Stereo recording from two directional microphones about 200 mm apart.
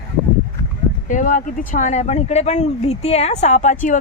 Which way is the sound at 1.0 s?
40° left (ahead or behind).